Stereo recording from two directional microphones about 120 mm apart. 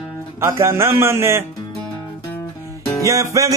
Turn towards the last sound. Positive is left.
turn(degrees=-25)  # may be behind; listen again after turning